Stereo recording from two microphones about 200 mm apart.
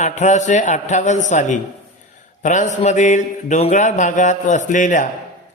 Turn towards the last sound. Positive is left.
turn(degrees=40)  # may be behind; listen again after turning